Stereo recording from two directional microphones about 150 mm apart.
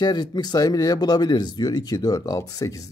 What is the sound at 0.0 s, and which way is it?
Speech, 30° left (ahead or behind).